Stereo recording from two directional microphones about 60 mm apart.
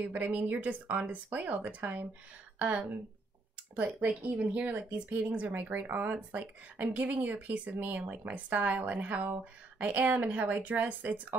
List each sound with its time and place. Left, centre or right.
0.0 s speech: right
3.7 s speech: right
4.1 s speech: centre